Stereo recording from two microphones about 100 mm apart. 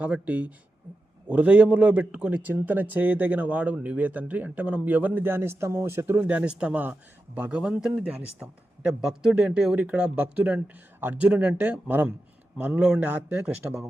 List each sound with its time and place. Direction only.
0.0 s a man's voice: 15° right (ahead or behind)